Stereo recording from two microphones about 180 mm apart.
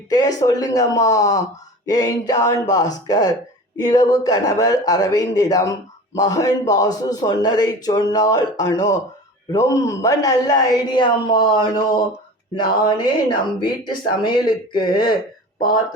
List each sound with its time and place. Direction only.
0.1 s a man's voice: 20° left (ahead or behind)